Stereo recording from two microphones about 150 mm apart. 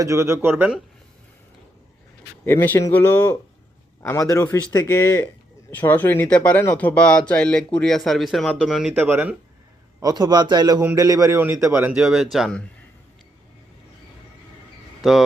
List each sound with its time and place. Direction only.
0.0 s a man's voice: 20° right (ahead or behind)
2.4 s a man's voice: 15° left (ahead or behind); by 8.9 s 5° right (ahead or behind)
8.9 s speech: 15° right (ahead or behind)
10.0 s a man's voice: 25° right (ahead or behind); by 12.6 s 5° left (ahead or behind)